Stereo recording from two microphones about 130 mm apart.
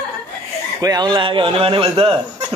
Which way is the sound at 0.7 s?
30° right (ahead or behind).